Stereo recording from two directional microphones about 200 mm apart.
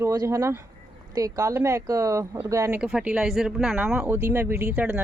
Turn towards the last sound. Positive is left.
turn(degrees=-10)  # may be behind; listen again after turning